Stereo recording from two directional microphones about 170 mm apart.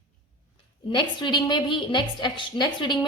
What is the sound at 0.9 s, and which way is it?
A woman's voice, 25° left (ahead or behind).